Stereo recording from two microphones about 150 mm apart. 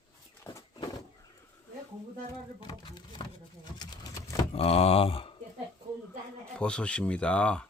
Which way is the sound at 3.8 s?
25° left (ahead or behind).